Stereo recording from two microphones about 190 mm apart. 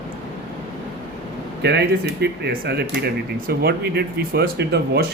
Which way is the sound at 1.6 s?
60° right (ahead or behind).